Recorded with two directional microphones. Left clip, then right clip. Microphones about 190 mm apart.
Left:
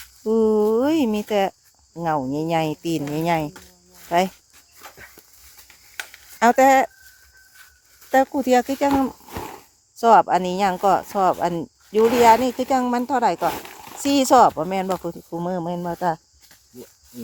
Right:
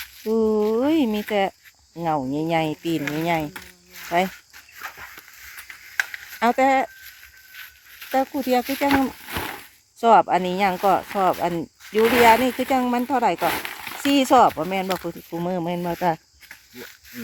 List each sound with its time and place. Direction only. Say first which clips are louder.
0.0 s a sound: left 2 dB; 15° left (ahead or behind)
2.0 s speech: left 1 dB; 5° left (ahead or behind)
6.4 s speech: left 4 dB; 20° left (ahead or behind)
8.1 s speech: left 4 dB; 20° left (ahead or behind)
8.6 s speech: left 1 dB; 5° left (ahead or behind)
9.2 s a sound: right 4 dB; 10° right (ahead or behind)
10.0 s speech: left 1 dB; 5° left (ahead or behind)